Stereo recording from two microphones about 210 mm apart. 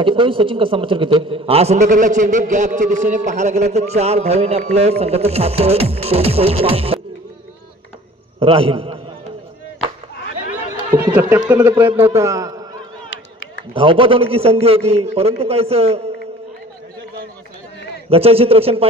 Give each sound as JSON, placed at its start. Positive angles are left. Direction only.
{"t": 0.0, "sound": "a man's voice", "side_deg": -25}
{"t": 8.4, "sound": "a man's voice", "side_deg": -25}
{"t": 11.1, "sound": "a man's voice", "side_deg": -5}
{"t": 13.7, "sound": "a man's voice", "side_deg": -25}
{"t": 18.1, "sound": "a man's voice", "side_deg": -30}